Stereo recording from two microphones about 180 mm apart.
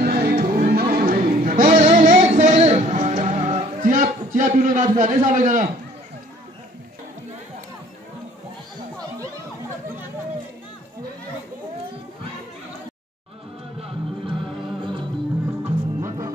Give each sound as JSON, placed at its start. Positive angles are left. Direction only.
{"t": 0.0, "sound": "a sound", "side_deg": -55}
{"t": 13.7, "sound": "music", "side_deg": -30}
{"t": 15.6, "sound": "music", "side_deg": -15}